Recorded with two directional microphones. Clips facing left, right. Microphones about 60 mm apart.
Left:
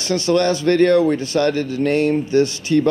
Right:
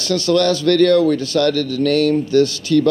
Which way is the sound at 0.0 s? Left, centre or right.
Left.